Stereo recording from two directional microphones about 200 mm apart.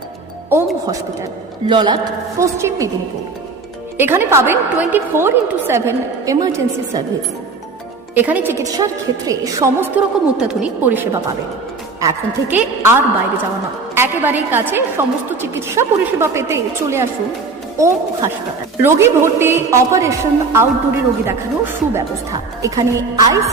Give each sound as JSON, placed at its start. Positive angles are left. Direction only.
{"t": 1.6, "sound": "a man's voice", "side_deg": -25}
{"t": 3.9, "sound": "a man's voice", "side_deg": -10}
{"t": 8.1, "sound": "a man's voice", "side_deg": -10}
{"t": 10.3, "sound": "a man's voice", "side_deg": -5}